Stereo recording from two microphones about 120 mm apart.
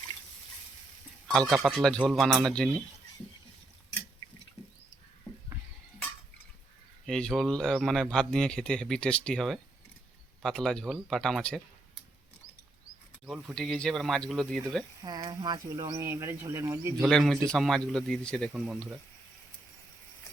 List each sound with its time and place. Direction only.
1.3 s speech: centre (ahead or behind)
7.0 s speech: 5° left (ahead or behind)
13.2 s speech: centre (ahead or behind)
15.0 s speech: 35° right (ahead or behind)
16.0 s speech: 25° right (ahead or behind)
17.0 s speech: 5° left (ahead or behind)
18.5 s speech: 10° right (ahead or behind)